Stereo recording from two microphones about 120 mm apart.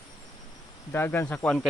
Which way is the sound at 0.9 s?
20° left (ahead or behind).